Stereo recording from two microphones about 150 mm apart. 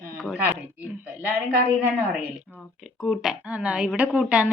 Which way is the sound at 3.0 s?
Centre (ahead or behind).